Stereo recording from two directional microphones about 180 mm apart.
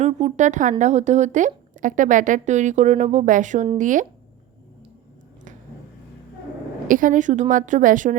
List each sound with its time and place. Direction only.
0.0 s a woman's voice: 40° right (ahead or behind)
6.8 s a woman's voice: 50° right (ahead or behind)